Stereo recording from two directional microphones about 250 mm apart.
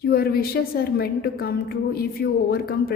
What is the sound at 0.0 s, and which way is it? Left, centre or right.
A woman's voice, left.